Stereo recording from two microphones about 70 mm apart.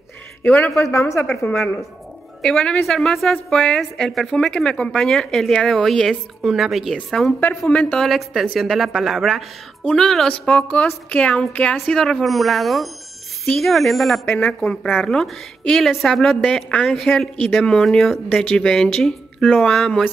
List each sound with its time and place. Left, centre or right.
0.9 s a woman's voice: left
2.4 s a woman's voice: centre
7.3 s a woman's voice: left
8.0 s a woman's voice: centre
10.3 s a woman's voice: centre
11.7 s a woman's voice: centre
19.4 s a woman's voice: centre
19.7 s speech: centre